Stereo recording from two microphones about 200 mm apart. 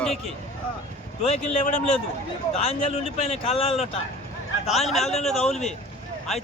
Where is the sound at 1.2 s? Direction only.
30° left (ahead or behind).